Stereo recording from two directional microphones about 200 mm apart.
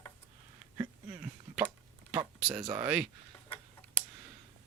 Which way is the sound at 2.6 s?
25° right (ahead or behind).